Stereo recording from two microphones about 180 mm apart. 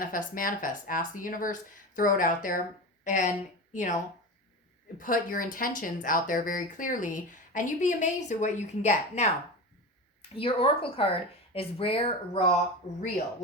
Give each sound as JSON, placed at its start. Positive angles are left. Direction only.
{"t": 0.0, "sound": "a woman's voice", "side_deg": 50}
{"t": 10.3, "sound": "speech", "side_deg": 30}